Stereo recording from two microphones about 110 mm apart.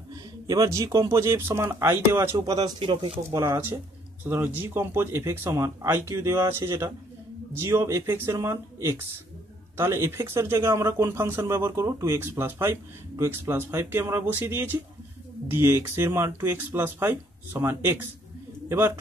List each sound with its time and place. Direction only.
0.1 s speech: 35° right (ahead or behind)
2.3 s speech: 35° right (ahead or behind)
2.8 s speech: 50° right (ahead or behind)
3.3 s speech: 25° right (ahead or behind)